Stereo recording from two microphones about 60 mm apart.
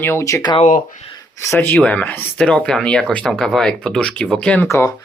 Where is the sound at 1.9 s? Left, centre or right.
Left.